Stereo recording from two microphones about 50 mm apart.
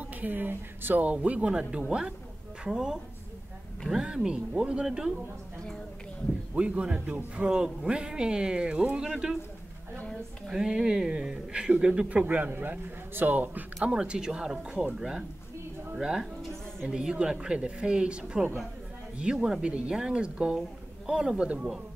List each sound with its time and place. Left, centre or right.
0.0 s speech: right
1.1 s a man's voice: right; by 5.1 s centre
6.5 s speech: right
9.0 s a man's voice: centre
10.5 s a man's voice: centre
12.2 s a man's voice: right
13.8 s a man's voice: centre